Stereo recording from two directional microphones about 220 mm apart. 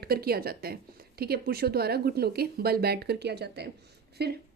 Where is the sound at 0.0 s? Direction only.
45° right (ahead or behind).